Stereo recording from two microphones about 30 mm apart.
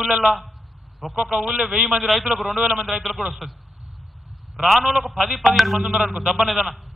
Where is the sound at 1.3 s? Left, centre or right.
Right.